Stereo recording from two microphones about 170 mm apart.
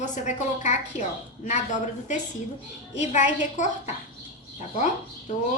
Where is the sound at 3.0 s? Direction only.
45° left (ahead or behind).